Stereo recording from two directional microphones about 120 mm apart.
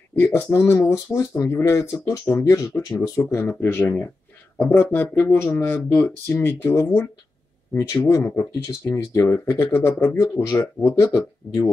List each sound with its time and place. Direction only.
0.1 s speech: 20° left (ahead or behind)